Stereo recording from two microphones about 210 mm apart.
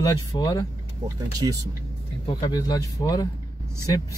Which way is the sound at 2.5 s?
20° left (ahead or behind).